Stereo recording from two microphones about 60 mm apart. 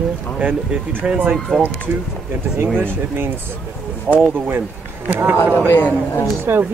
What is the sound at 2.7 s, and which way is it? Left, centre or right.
Speech, right.